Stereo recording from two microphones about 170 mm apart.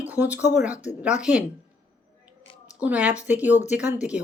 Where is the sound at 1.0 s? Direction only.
5° right (ahead or behind).